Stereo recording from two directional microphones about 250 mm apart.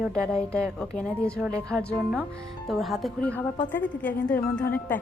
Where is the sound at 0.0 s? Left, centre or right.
Centre.